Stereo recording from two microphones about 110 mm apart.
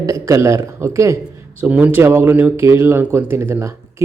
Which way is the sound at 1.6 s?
15° right (ahead or behind).